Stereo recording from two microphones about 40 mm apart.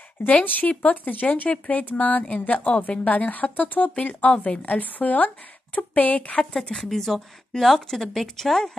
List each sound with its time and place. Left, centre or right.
0.3 s a woman's voice: left
6.5 s speech: centre